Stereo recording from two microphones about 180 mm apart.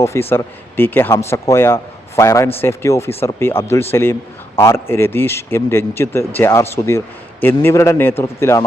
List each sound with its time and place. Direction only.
0.0 s speech: 15° left (ahead or behind)